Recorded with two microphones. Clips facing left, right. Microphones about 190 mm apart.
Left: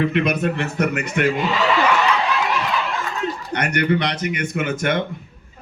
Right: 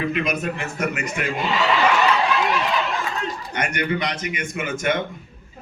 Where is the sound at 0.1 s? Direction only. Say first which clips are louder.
Left 4 dB; 70° left (ahead or behind).